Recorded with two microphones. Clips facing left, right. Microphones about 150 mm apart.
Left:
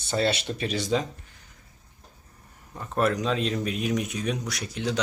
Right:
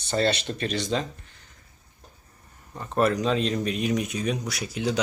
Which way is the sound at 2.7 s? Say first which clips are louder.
Right 2 dB; centre (ahead or behind).